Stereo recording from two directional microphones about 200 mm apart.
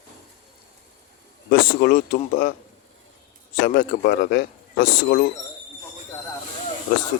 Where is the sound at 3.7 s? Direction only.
50° left (ahead or behind).